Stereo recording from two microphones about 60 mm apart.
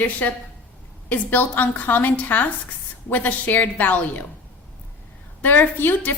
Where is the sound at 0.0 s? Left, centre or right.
Left.